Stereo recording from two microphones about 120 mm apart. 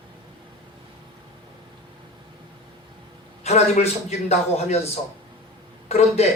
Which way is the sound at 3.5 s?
65° left (ahead or behind).